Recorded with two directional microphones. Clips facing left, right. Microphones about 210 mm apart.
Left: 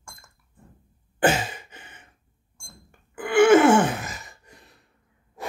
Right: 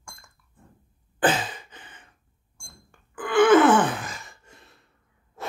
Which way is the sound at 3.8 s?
25° left (ahead or behind).